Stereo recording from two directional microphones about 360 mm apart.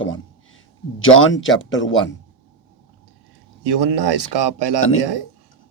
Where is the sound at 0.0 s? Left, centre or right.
Left.